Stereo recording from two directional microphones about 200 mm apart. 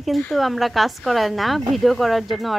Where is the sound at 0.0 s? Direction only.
Centre (ahead or behind).